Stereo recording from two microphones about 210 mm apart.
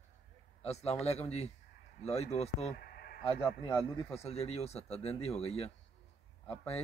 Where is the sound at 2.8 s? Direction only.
50° left (ahead or behind).